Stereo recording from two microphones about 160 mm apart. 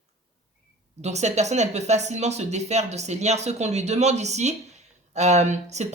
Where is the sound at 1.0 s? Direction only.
45° right (ahead or behind).